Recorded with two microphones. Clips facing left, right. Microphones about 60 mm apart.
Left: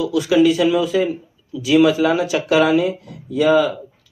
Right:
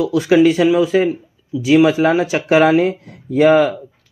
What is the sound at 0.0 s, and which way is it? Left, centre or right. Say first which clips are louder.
Speech: right 3 dB; right.